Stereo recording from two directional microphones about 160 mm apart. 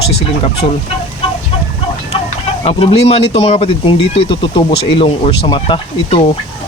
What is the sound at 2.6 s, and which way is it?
Speech, 35° left (ahead or behind).